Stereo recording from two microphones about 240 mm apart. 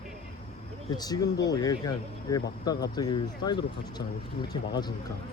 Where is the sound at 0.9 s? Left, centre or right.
Centre.